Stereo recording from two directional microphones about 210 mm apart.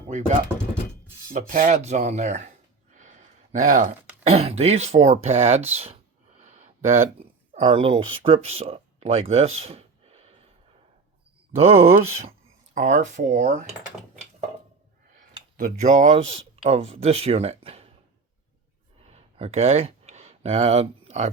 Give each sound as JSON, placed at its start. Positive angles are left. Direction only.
{"t": 1.3, "sound": "speech", "side_deg": -40}
{"t": 11.5, "sound": "speech", "side_deg": -30}
{"t": 15.5, "sound": "speech", "side_deg": -35}
{"t": 19.0, "sound": "a sound", "side_deg": -30}